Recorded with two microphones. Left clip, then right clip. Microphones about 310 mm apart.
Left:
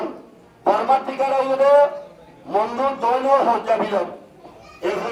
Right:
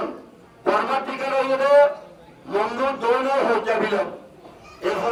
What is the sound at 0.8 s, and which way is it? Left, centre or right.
Speech, centre.